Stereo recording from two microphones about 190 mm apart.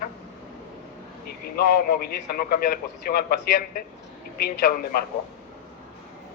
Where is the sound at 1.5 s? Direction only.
55° left (ahead or behind).